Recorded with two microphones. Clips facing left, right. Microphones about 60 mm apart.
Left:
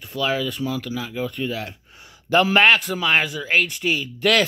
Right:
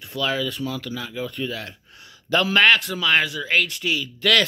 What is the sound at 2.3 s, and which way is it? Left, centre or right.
A man's voice, left.